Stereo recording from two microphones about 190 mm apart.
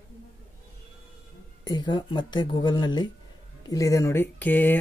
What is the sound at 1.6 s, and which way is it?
Speech, 20° left (ahead or behind).